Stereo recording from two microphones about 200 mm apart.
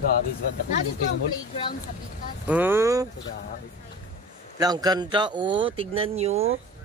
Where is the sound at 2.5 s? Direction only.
10° right (ahead or behind).